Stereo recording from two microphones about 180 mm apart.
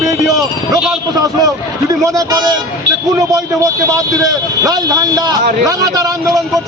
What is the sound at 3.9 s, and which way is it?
Speech, 20° right (ahead or behind).